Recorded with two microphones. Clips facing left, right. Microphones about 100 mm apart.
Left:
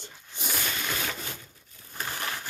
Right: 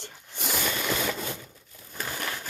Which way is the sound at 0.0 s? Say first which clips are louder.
Right 3 dB; 75° right (ahead or behind).